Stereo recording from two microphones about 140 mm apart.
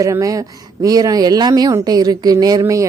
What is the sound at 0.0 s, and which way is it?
Speech, 25° right (ahead or behind).